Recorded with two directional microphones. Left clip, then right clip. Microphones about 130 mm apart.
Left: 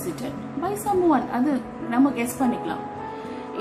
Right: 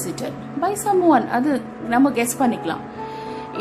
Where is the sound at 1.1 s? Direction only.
80° right.